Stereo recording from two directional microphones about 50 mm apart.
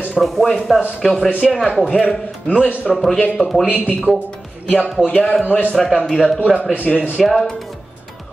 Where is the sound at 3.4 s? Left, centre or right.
Left.